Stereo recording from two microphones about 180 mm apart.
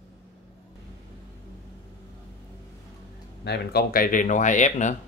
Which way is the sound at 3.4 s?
65° left (ahead or behind).